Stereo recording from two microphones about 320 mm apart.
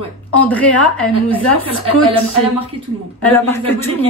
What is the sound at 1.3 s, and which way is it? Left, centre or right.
Speech, centre.